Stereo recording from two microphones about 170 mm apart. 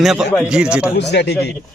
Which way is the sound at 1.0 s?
80° left.